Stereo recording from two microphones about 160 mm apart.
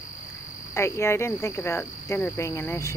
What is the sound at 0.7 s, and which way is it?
Cricket, 15° left (ahead or behind).